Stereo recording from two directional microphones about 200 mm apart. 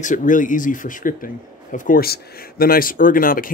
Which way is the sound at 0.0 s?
40° left (ahead or behind).